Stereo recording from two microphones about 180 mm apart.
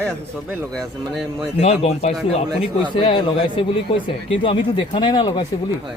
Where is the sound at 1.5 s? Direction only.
35° left (ahead or behind).